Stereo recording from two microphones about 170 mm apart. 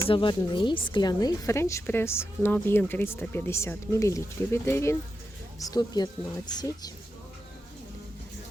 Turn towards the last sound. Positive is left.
turn(degrees=25)  # may be behind; listen again after turning